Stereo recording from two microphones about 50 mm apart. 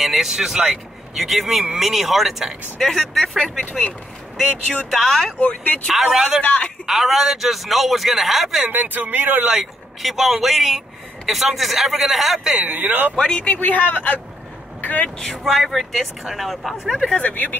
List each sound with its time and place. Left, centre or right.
0.0 s speech: centre
3.3 s speech: centre
4.9 s speech: centre
5.4 s speech: left
5.9 s speech: centre
6.4 s speech: left
6.9 s speech: centre
8.7 s speech: right
9.5 s speech: centre
12.6 s speech: right
13.1 s speech: left
14.8 s vehicle: left
15.4 s speech: centre
17.2 s speech: left